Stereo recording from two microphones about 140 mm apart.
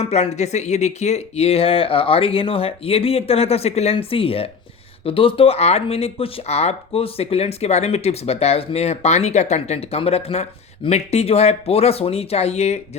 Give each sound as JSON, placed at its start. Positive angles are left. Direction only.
{"t": 0.0, "sound": "speech", "side_deg": 50}